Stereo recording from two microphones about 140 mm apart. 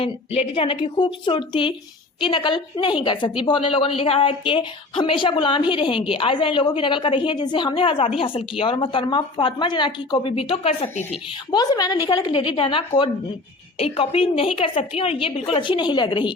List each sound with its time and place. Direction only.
0.0 s a woman's voice: 45° left (ahead or behind)
11.5 s a woman's voice: 30° left (ahead or behind)